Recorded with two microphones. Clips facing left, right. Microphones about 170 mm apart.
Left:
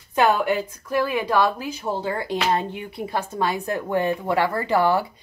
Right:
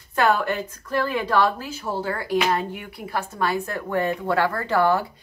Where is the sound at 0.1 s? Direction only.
15° left (ahead or behind).